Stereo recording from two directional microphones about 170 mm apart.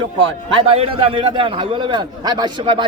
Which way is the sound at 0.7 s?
35° right (ahead or behind).